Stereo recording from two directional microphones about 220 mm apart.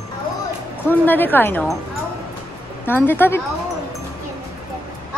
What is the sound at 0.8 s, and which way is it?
Speech, 10° left (ahead or behind).